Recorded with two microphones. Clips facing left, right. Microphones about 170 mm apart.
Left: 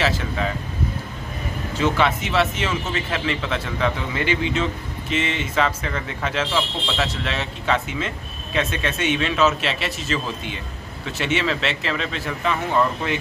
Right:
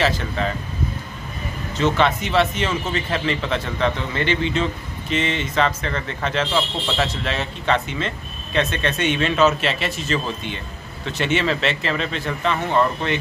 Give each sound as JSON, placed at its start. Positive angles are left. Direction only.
{"t": 0.0, "sound": "speech", "side_deg": 5}
{"t": 1.8, "sound": "speech", "side_deg": 5}